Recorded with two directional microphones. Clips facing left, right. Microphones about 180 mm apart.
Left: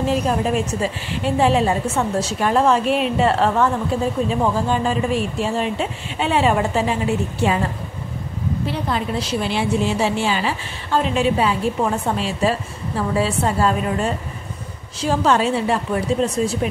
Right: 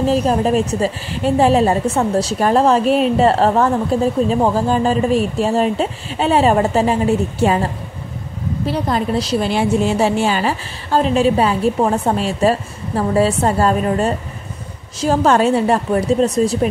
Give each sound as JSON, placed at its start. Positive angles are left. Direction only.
{"t": 0.1, "sound": "a woman's voice", "side_deg": -35}
{"t": 8.6, "sound": "a woman's voice", "side_deg": -40}